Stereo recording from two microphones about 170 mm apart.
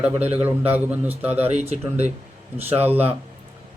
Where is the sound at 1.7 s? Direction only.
40° right (ahead or behind).